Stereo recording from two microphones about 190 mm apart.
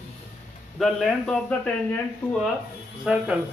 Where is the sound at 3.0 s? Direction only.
5° right (ahead or behind).